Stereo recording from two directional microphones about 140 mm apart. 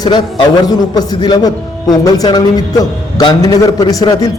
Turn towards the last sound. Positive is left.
turn(degrees=25)  # may be behind; listen again after turning